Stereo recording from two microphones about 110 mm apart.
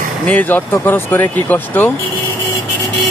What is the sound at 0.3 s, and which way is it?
Speech, 15° left (ahead or behind).